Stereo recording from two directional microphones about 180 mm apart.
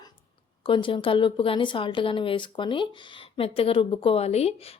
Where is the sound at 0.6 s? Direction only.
30° left (ahead or behind).